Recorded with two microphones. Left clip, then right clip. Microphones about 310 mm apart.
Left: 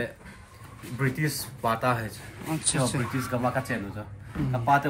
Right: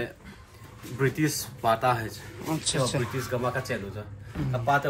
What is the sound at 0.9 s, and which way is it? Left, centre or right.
A man's voice, centre.